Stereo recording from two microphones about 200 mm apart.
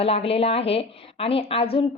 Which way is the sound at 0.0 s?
30° left (ahead or behind).